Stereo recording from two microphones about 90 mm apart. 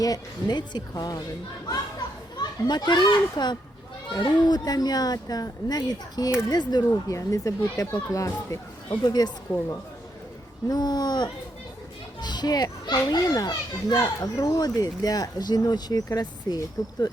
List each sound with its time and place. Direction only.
0.0 s a child's voice: 45° left (ahead or behind)
2.4 s a child's voice: 50° left (ahead or behind)
7.1 s speech: 40° left (ahead or behind)
8.9 s a child's voice: 50° left (ahead or behind)
10.7 s a child's voice: 50° left (ahead or behind)